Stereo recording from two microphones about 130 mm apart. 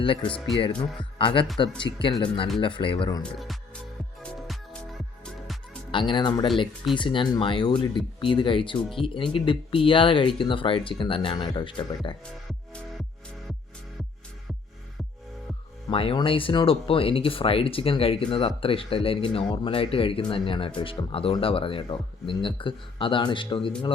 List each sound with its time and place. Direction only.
0.8 s speech: 40° left (ahead or behind)
3.3 s speech: centre (ahead or behind)
4.2 s music: 5° left (ahead or behind)
5.9 s speech: 40° left (ahead or behind)
12.2 s music: 5° left (ahead or behind)
15.9 s speech: 45° left (ahead or behind)